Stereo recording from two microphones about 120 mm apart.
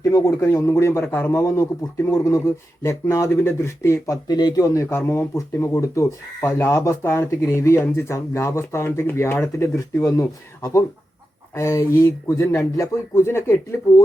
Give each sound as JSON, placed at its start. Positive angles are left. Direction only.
{"t": 0.0, "sound": "speech", "side_deg": 25}